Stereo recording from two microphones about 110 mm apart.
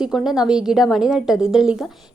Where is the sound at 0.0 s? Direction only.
5° right (ahead or behind).